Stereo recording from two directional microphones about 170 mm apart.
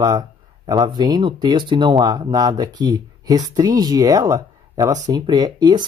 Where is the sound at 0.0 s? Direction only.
20° right (ahead or behind).